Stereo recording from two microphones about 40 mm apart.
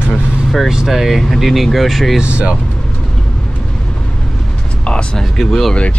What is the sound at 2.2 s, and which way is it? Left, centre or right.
Speech, right.